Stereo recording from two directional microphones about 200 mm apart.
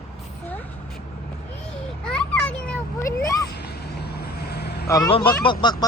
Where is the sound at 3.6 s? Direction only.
55° left (ahead or behind).